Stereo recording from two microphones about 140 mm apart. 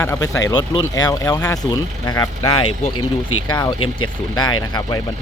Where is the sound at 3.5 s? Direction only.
30° left (ahead or behind).